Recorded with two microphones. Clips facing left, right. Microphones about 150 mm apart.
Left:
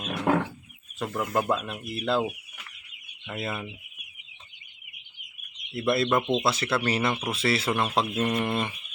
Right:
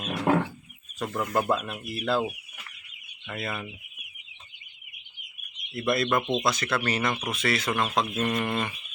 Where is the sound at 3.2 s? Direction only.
15° left (ahead or behind).